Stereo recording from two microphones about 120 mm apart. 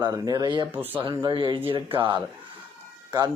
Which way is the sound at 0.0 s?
30° right (ahead or behind).